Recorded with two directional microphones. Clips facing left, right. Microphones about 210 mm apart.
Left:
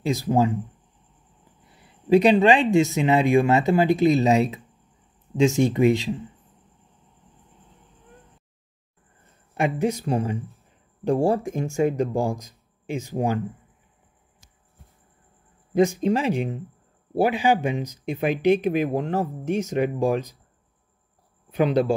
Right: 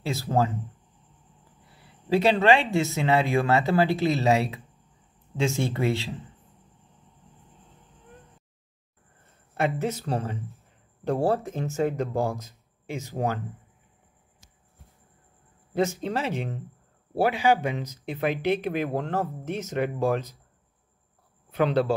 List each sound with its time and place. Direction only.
0.0 s speech: 15° left (ahead or behind)
2.0 s speech: 15° left (ahead or behind)
9.5 s speech: 15° left (ahead or behind)
15.7 s speech: 15° left (ahead or behind)
21.5 s a man's voice: 15° left (ahead or behind)